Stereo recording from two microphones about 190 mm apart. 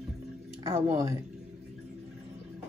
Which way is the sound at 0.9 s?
15° right (ahead or behind).